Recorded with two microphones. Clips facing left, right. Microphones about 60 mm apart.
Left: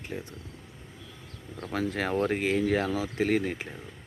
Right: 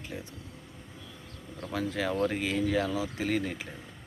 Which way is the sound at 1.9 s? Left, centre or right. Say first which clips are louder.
Left 1 dB; left.